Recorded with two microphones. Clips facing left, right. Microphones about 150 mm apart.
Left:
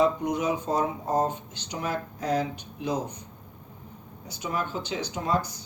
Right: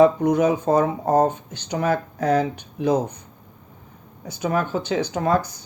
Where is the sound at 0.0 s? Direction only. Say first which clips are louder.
Right 8 dB; 55° right (ahead or behind).